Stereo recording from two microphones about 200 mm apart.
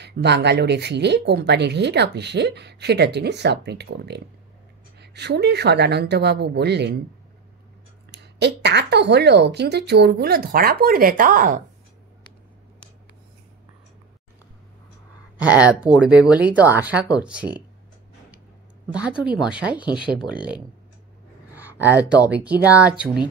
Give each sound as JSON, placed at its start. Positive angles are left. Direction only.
{"t": 0.0, "sound": "speech", "side_deg": -55}
{"t": 8.1, "sound": "a woman's voice", "side_deg": -60}
{"t": 15.4, "sound": "speech", "side_deg": -5}
{"t": 18.9, "sound": "speech", "side_deg": -5}